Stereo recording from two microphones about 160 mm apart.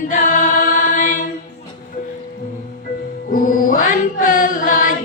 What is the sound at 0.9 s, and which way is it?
Mantra, 55° left (ahead or behind).